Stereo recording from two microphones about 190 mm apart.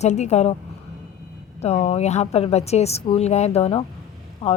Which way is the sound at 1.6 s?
35° left (ahead or behind).